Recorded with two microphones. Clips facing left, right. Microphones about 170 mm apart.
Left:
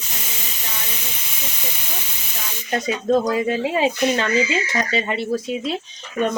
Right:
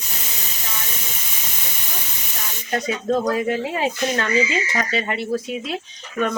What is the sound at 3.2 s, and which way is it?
Speech, 20° left (ahead or behind).